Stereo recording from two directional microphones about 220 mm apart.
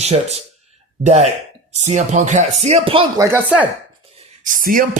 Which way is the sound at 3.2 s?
10° right (ahead or behind).